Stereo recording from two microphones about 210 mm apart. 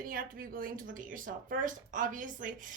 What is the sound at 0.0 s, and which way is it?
A woman's voice, 40° right (ahead or behind).